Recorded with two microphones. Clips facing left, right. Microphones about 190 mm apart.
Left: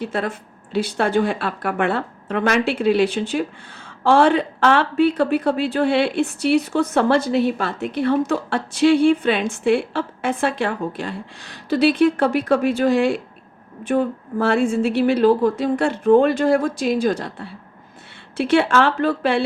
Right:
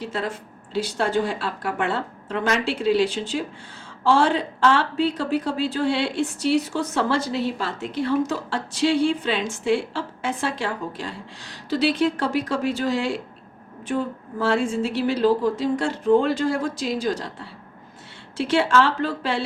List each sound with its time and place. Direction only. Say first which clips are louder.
0.0 s a woman's voice: left 4 dB; 55° left (ahead or behind)